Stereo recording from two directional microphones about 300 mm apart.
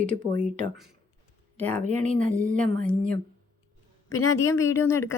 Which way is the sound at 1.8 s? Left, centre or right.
Right.